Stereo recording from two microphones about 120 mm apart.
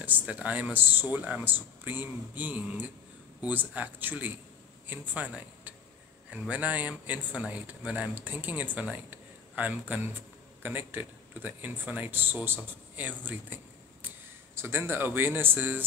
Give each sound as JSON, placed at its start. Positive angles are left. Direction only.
{"t": 0.0, "sound": "speech", "side_deg": -15}